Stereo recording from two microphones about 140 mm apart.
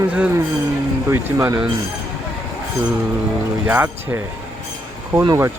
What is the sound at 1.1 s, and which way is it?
Speech, 20° right (ahead or behind).